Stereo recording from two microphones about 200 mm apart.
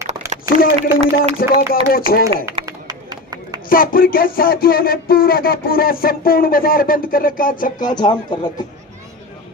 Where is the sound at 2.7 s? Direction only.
20° right (ahead or behind).